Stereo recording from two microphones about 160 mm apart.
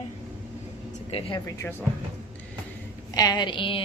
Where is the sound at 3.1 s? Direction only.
25° left (ahead or behind).